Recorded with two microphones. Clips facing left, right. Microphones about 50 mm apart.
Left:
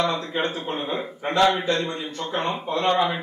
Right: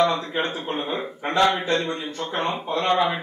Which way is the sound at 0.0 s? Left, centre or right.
Right.